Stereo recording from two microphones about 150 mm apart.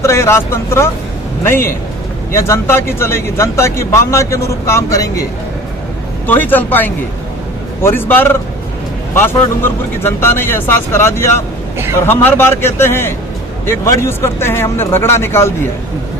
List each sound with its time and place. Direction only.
0.0 s speech: 20° left (ahead or behind)
6.2 s speech: 10° left (ahead or behind)